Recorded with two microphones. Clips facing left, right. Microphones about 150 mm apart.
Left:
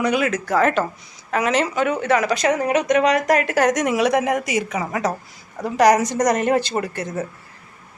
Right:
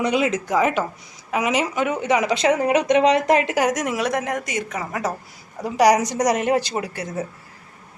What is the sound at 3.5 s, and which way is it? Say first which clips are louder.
A woman's voice: left 3 dB; 5° right (ahead or behind).